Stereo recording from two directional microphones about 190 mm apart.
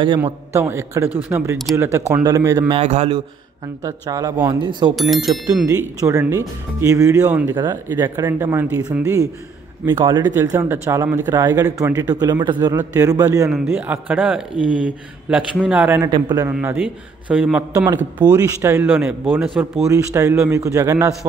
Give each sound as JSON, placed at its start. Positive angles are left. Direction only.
{"t": 0.2, "sound": "speech", "side_deg": -15}
{"t": 2.7, "sound": "a man's voice", "side_deg": -35}
{"t": 3.8, "sound": "speech", "side_deg": -20}
{"t": 5.9, "sound": "speech", "side_deg": -15}
{"t": 7.5, "sound": "speech", "side_deg": -20}
{"t": 16.0, "sound": "speech", "side_deg": -20}
{"t": 16.4, "sound": "speech", "side_deg": -10}